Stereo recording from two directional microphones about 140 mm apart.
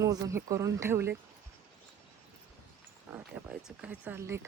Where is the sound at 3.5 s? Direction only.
5° right (ahead or behind).